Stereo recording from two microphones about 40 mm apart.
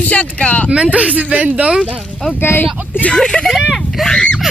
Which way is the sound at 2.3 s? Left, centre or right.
Left.